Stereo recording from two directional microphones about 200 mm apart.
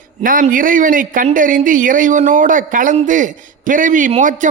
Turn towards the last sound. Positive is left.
turn(degrees=-40)  # may be behind; listen again after turning